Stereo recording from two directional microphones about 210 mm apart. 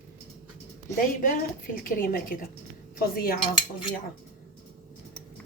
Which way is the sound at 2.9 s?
45° left (ahead or behind).